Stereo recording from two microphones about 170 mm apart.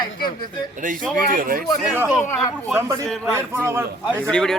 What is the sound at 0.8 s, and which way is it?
Speech, 50° right (ahead or behind).